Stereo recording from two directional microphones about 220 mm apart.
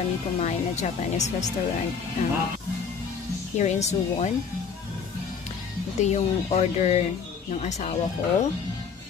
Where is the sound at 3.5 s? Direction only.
30° left (ahead or behind).